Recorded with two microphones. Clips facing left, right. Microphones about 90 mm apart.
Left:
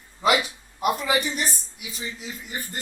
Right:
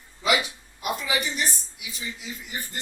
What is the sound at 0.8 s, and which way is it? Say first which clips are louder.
Speech: left 5 dB; 45° left (ahead or behind).